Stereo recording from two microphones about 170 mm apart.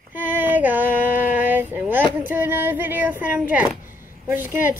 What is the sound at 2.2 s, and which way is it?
Speech, 10° right (ahead or behind).